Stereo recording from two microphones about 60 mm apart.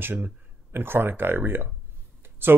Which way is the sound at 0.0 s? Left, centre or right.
Right.